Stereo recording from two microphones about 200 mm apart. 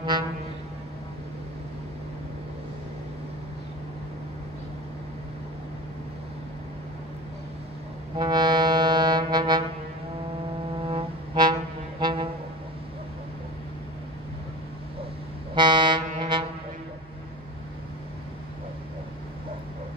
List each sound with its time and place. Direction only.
8.2 s brass instrument: 20° right (ahead or behind)
10.8 s music: 25° right (ahead or behind)
12.0 s brass instrument: 25° right (ahead or behind)
15.5 s vehicle: 25° right (ahead or behind)